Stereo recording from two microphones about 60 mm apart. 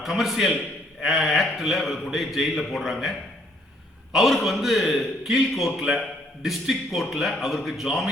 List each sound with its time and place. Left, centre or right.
0.0 s a man's voice: centre